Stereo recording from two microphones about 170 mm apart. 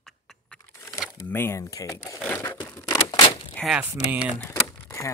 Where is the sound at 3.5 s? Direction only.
Centre (ahead or behind).